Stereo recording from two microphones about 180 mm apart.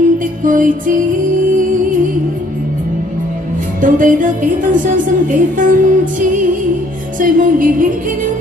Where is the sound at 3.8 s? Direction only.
50° right (ahead or behind).